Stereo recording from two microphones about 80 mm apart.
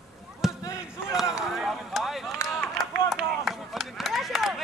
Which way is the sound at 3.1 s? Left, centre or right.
Centre.